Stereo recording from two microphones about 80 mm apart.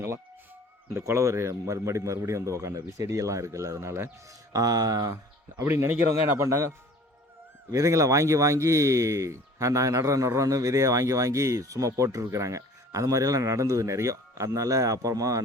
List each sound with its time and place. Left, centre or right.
0.9 s speech: right
5.6 s speech: right